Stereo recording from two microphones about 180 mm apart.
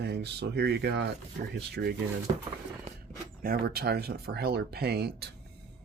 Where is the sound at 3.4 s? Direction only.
55° right (ahead or behind).